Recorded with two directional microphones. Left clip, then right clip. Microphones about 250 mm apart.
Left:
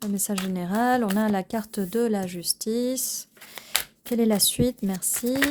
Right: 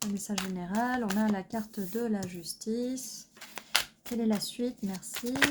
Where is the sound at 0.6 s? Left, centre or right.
Left.